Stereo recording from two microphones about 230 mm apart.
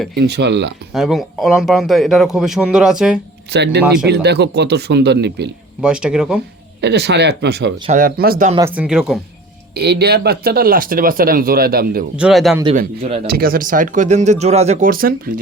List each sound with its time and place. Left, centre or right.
0.2 s speech: right
0.9 s a man's voice: centre
3.5 s speech: right
5.8 s a man's voice: centre
6.8 s speech: right
7.9 s speech: right
8.5 s a man's voice: centre
9.7 s speech: right
12.1 s a man's voice: centre
13.0 s speech: right
13.2 s speech: right